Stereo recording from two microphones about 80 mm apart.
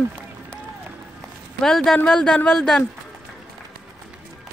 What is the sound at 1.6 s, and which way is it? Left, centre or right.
Speech, centre.